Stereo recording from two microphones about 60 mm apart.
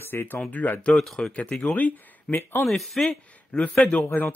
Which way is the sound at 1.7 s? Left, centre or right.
Left.